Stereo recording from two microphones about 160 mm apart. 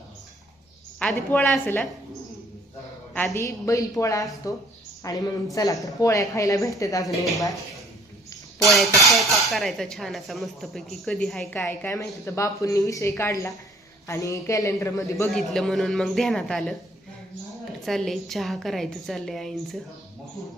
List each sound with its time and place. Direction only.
0.9 s a woman's voice: 10° left (ahead or behind)
3.3 s speech: 20° left (ahead or behind)
7.0 s speech: centre (ahead or behind)
8.6 s speech: centre (ahead or behind)
11.7 s a woman's voice: 15° left (ahead or behind)
15.3 s speech: centre (ahead or behind)
17.8 s speech: centre (ahead or behind)